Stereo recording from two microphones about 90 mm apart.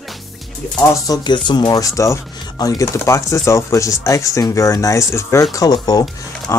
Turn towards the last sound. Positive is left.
turn(degrees=45)  # may be behind; listen again after turning